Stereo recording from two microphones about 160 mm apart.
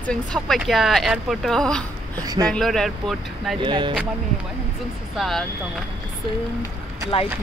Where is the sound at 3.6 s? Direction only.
30° right (ahead or behind).